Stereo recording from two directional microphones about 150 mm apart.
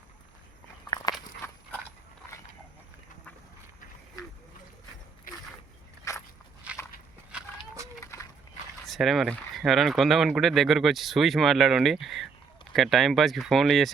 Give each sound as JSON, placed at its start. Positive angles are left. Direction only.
{"t": 1.1, "sound": "walk", "side_deg": 25}
{"t": 1.4, "sound": "horse", "side_deg": 15}
{"t": 5.3, "sound": "dog", "side_deg": 65}
{"t": 6.1, "sound": "biting", "side_deg": 20}
{"t": 6.7, "sound": "walk", "side_deg": -10}
{"t": 8.0, "sound": "a sound", "side_deg": 20}
{"t": 8.9, "sound": "speech", "side_deg": 0}